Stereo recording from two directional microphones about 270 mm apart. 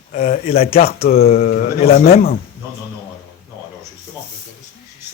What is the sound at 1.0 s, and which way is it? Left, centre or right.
Speech, left.